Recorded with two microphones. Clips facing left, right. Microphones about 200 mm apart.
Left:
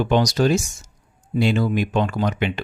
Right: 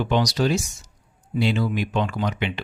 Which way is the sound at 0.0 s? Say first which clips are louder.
Left 3 dB; 45° left (ahead or behind).